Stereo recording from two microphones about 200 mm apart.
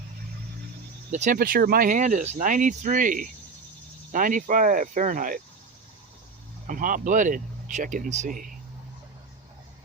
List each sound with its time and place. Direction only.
1.1 s speech: 40° right (ahead or behind)
6.7 s speech: 40° right (ahead or behind)